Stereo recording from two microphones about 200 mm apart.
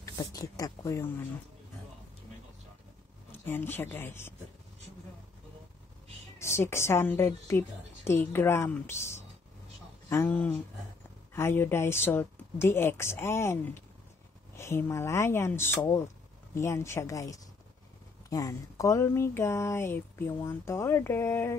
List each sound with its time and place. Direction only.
0.0 s a sound: 15° left (ahead or behind)
3.3 s speech: 10° left (ahead or behind)
6.3 s speech: 15° left (ahead or behind)